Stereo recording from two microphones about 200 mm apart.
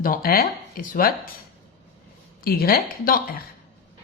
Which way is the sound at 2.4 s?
50° left (ahead or behind).